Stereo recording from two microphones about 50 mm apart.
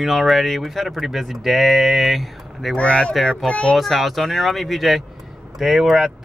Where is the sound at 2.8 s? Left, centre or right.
Left.